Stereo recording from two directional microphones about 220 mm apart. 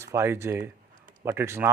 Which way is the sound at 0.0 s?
10° right (ahead or behind).